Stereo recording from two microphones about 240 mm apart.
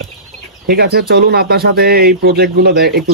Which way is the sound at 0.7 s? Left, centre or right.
Right.